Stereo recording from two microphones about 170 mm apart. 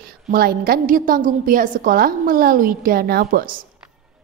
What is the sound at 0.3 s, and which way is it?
A woman's voice, 60° right (ahead or behind).